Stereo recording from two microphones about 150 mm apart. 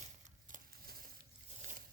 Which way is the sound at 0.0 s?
60° right (ahead or behind).